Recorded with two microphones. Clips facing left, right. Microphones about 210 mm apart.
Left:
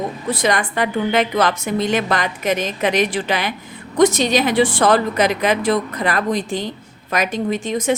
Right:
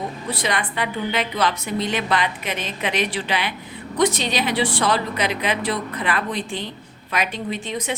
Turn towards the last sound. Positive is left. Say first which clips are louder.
# left 7 dB
turn(degrees=45)  # may be behind; listen again after turning